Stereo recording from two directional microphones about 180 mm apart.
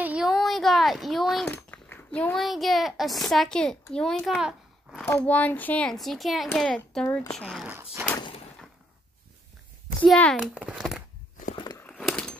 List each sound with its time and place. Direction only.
0.0 s a sound: 5° right (ahead or behind)
1.5 s a child's voice: 10° left (ahead or behind)
5.0 s speech: 10° left (ahead or behind)
7.6 s speech: 10° right (ahead or behind)
10.0 s speech: 5° left (ahead or behind)
10.3 s speech: 5° right (ahead or behind)
11.5 s a sound: 20° left (ahead or behind)
11.8 s horse: 5° left (ahead or behind)